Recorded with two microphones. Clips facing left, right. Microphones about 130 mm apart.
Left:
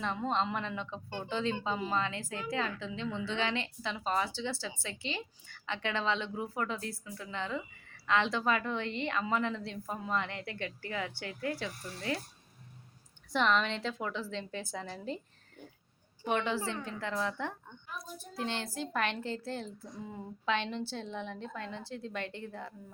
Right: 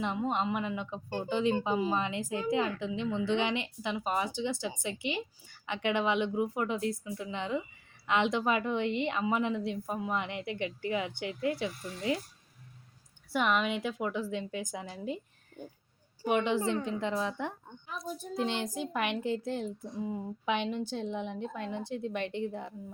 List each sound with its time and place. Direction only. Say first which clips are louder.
0.0 s a woman's voice: right 1 dB; 15° right (ahead or behind)
13.3 s a woman's voice: right 1 dB; 10° right (ahead or behind)
16.2 s a woman's voice: right 4 dB; 15° right (ahead or behind)